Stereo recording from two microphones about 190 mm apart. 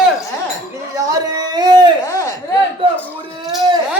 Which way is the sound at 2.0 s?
15° left (ahead or behind).